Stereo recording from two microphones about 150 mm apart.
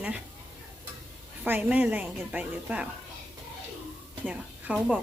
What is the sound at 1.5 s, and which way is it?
A woman's voice, 10° right (ahead or behind).